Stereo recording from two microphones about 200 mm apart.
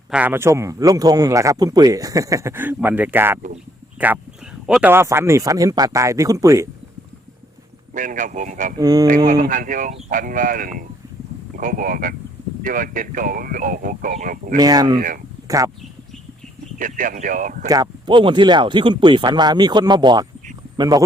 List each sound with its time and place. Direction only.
0.1 s speech: 10° right (ahead or behind)
4.6 s speech: 5° right (ahead or behind)
7.9 s speech: 40° right (ahead or behind)
8.8 s speech: 20° right (ahead or behind)
9.0 s speech: 40° right (ahead or behind)
14.6 s speech: 20° right (ahead or behind)
14.9 s speech: 40° right (ahead or behind)
15.4 s speech: 15° right (ahead or behind)
16.7 s speech: 40° right (ahead or behind)
17.7 s speech: 20° right (ahead or behind)